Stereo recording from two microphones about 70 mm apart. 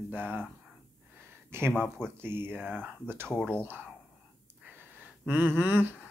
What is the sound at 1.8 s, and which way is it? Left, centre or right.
Speech, centre.